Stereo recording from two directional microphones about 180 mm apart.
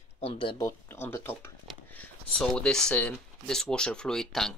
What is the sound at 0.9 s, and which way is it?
Speech, 15° left (ahead or behind).